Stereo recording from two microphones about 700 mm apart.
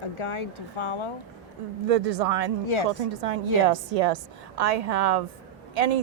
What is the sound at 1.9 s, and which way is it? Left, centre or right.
Speech, right.